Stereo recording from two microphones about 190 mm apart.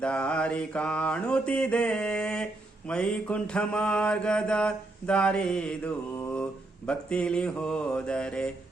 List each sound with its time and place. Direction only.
0.0 s mantra: 5° left (ahead or behind)